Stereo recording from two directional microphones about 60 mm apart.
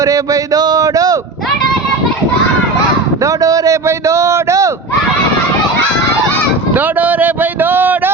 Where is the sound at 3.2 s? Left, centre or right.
Right.